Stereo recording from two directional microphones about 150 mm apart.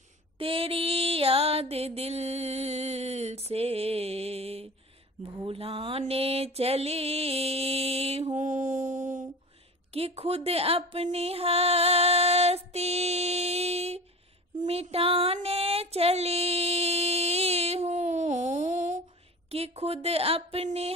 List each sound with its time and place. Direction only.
0.4 s mantra: 40° right (ahead or behind); by 9.3 s 55° right (ahead or behind)
9.9 s speech: 40° right (ahead or behind)
14.6 s music: 40° right (ahead or behind)
19.5 s a woman's voice: 45° right (ahead or behind)